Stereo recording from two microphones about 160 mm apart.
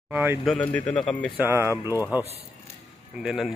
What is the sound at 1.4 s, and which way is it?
Speech, 15° right (ahead or behind).